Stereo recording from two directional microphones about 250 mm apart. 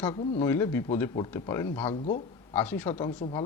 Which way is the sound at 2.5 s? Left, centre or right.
Centre.